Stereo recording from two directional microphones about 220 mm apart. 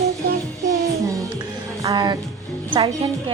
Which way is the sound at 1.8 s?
20° right (ahead or behind).